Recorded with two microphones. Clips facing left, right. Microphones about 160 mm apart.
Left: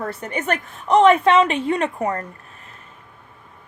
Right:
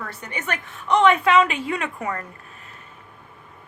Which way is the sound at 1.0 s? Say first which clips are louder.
Left 3 dB; 30° left (ahead or behind).